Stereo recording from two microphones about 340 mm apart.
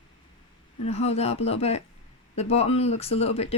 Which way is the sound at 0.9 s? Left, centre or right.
Centre.